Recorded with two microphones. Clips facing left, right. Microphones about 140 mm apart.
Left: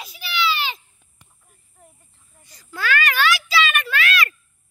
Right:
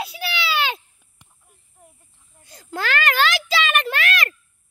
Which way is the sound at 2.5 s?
50° right (ahead or behind).